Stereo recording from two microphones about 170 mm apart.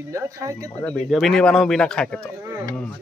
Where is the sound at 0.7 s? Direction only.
10° left (ahead or behind).